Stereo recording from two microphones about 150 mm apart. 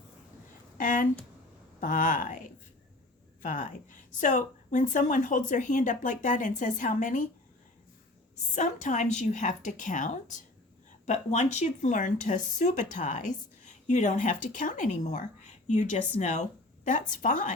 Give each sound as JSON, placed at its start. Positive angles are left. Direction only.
{"t": 0.8, "sound": "a woman's voice", "side_deg": 60}
{"t": 3.4, "sound": "a woman's voice", "side_deg": 60}
{"t": 8.5, "sound": "a woman's voice", "side_deg": 55}